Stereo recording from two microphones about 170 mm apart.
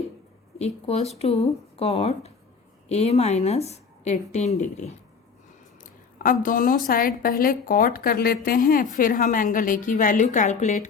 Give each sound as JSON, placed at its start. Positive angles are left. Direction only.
{"t": 0.6, "sound": "a woman's voice", "side_deg": 40}
{"t": 6.2, "sound": "a woman's voice", "side_deg": 50}